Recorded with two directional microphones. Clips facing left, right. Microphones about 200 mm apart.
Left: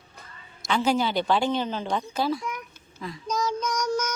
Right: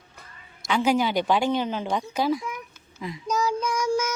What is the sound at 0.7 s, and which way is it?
A woman's voice, 10° right (ahead or behind).